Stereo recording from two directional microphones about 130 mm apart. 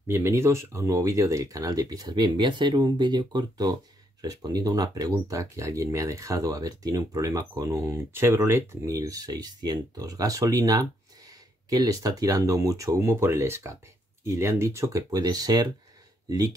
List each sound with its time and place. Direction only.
0.1 s speech: 20° right (ahead or behind)